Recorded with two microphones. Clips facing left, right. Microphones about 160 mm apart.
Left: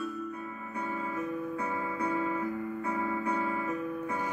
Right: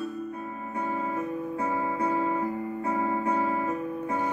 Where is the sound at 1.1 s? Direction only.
35° right (ahead or behind).